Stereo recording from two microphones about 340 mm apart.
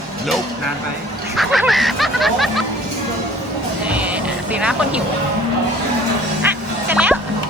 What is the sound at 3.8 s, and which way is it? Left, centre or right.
Speech, centre.